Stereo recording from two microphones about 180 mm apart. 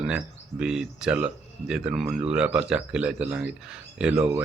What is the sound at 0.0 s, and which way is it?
Speech, 5° right (ahead or behind).